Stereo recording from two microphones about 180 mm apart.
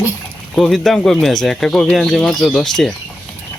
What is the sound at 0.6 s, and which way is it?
Speech, centre (ahead or behind).